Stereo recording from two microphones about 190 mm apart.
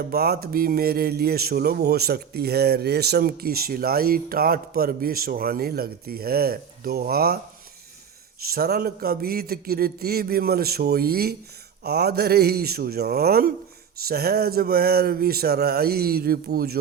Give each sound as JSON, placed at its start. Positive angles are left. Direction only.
{"t": 0.1, "sound": "a man's voice", "side_deg": -55}
{"t": 8.5, "sound": "a man's voice", "side_deg": -55}